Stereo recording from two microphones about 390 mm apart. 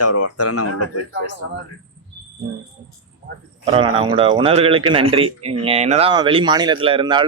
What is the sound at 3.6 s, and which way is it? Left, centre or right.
A man's voice, centre.